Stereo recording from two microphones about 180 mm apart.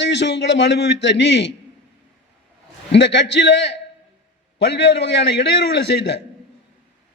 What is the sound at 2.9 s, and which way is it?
A man's voice, 75° left (ahead or behind).